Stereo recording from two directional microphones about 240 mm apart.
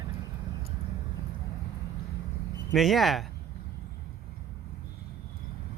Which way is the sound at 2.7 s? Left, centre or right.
Centre.